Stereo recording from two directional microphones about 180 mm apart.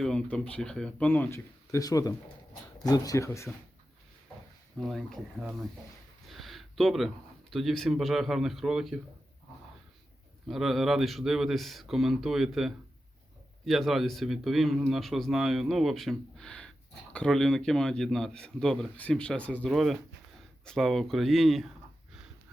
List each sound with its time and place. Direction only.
0.0 s speech: 5° left (ahead or behind)
4.8 s a man's voice: centre (ahead or behind)
6.2 s a sound: centre (ahead or behind)
7.5 s a man's voice: centre (ahead or behind)
10.5 s a man's voice: centre (ahead or behind)